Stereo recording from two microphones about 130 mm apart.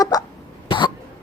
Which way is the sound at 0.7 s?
35° left (ahead or behind).